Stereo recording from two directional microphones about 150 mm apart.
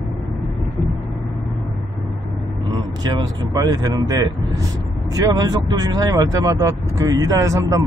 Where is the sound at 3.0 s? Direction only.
25° right (ahead or behind).